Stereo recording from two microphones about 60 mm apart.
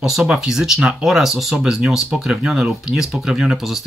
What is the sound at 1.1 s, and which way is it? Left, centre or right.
Speech, centre.